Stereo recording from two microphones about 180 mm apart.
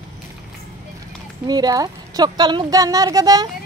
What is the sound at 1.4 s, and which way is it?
Speech, 20° right (ahead or behind).